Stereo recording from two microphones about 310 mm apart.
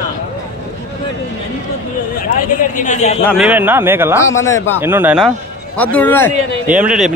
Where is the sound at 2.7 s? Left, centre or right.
Left.